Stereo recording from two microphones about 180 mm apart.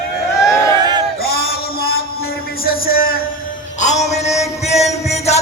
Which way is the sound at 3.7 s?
40° left (ahead or behind).